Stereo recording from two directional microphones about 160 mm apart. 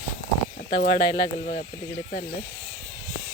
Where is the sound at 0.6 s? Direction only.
35° left (ahead or behind).